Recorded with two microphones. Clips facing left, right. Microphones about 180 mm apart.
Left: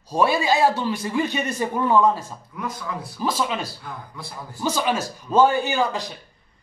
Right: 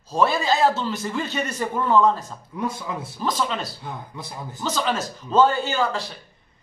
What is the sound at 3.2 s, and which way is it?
Speech, 5° left (ahead or behind).